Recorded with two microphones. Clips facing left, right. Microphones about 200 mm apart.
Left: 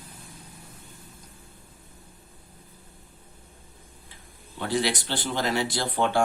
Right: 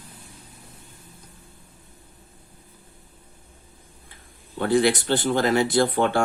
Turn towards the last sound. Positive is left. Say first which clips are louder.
# right 4 dB
turn(degrees=-50)  # may be behind; listen again after turning